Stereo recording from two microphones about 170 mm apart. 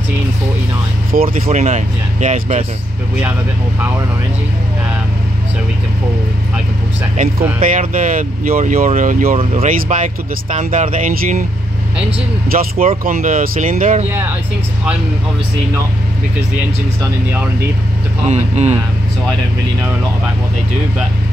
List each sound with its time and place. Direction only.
1.1 s speech: 55° right (ahead or behind)
7.7 s speech: 50° right (ahead or behind)
12.4 s speech: 55° right (ahead or behind)
18.2 s speech: 40° right (ahead or behind)